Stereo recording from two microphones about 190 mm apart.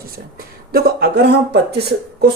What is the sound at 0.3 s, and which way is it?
Speech, 55° right (ahead or behind).